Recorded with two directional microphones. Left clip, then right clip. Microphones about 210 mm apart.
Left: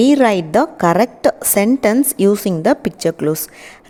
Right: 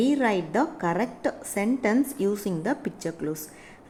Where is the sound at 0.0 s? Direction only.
50° left (ahead or behind).